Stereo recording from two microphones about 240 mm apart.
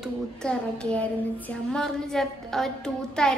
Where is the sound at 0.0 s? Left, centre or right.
Centre.